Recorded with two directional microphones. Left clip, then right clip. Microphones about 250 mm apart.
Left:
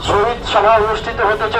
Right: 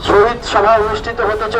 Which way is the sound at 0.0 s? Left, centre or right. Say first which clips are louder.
Right 4 dB; left.